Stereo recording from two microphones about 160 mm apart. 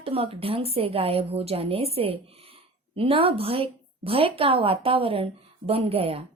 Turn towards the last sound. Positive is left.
turn(degrees=-35)  # may be behind; listen again after turning